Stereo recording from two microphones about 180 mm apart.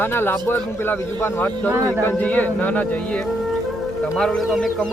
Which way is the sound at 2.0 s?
10° left (ahead or behind).